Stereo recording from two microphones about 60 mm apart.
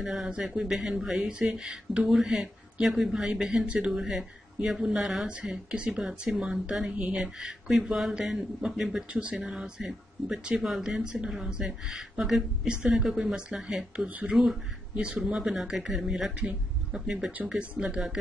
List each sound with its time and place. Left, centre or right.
0.0 s a woman's voice: centre
5.3 s a woman's voice: centre
9.1 s speech: right
9.5 s a woman's voice: centre
10.4 s a woman's voice: centre
14.0 s speech: right
14.3 s speech: centre
15.0 s a woman's voice: centre
16.3 s a woman's voice: centre